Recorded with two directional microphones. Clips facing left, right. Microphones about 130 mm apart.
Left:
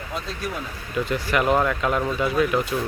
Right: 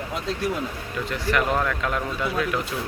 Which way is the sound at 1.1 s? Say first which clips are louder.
Left 2 dB; centre (ahead or behind).